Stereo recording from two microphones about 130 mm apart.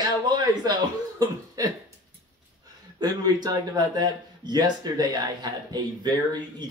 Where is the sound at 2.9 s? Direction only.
30° right (ahead or behind).